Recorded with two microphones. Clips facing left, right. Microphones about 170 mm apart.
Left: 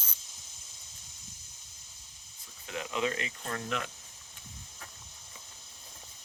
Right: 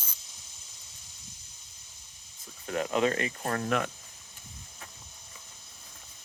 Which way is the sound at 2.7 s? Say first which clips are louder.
Right 6 dB; 50° right (ahead or behind).